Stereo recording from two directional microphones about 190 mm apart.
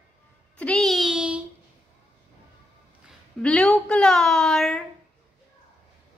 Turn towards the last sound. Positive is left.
turn(degrees=5)  # may be behind; listen again after turning